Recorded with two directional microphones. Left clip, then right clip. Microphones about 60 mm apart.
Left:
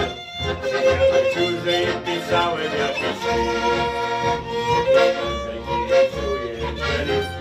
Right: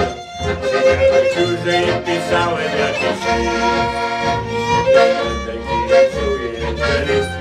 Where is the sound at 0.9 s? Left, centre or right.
Right.